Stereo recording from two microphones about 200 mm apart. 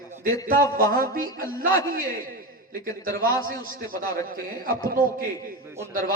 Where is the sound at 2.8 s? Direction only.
45° right (ahead or behind).